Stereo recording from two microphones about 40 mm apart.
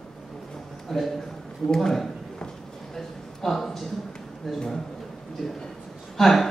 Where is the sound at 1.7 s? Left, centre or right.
Centre.